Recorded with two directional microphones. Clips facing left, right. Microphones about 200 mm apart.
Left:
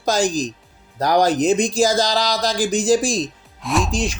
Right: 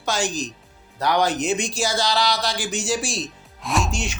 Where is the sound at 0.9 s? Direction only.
40° left (ahead or behind).